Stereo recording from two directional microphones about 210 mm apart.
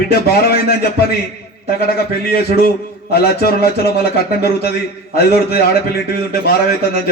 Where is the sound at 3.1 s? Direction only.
50° left (ahead or behind).